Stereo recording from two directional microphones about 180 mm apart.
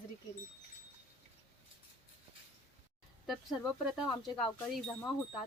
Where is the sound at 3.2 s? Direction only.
Centre (ahead or behind).